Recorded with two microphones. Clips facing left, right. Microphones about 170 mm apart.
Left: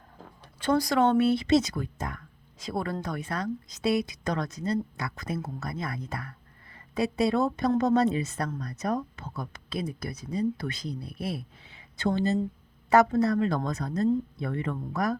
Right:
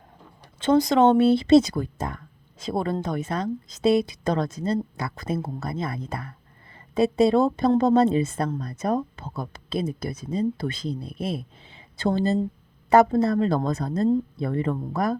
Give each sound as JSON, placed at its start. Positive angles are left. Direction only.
{"t": 0.4, "sound": "speech", "side_deg": -20}